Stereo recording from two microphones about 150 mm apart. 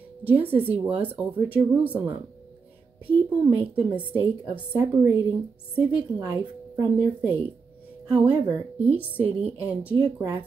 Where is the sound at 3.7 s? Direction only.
10° right (ahead or behind).